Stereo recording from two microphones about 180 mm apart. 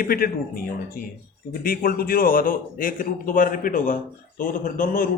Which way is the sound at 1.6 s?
55° left (ahead or behind).